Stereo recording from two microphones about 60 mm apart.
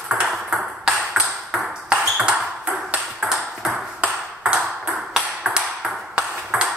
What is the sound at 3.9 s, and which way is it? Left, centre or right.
Ping, centre.